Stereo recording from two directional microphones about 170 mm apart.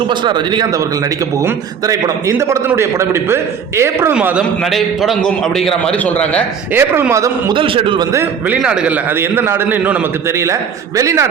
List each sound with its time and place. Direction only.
0.1 s a man's voice: 25° right (ahead or behind); by 6.4 s 10° left (ahead or behind)
6.7 s a man's voice: 15° right (ahead or behind)
7.5 s a man's voice: 30° right (ahead or behind)
8.1 s a man's voice: 10° right (ahead or behind)